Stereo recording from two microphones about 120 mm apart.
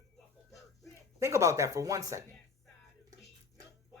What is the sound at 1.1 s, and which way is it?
Speech, 25° right (ahead or behind).